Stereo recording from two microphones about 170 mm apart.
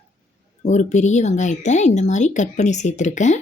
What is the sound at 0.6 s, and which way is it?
Speech, 45° left (ahead or behind).